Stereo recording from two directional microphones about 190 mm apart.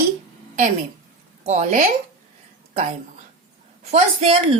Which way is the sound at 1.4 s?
40° right (ahead or behind).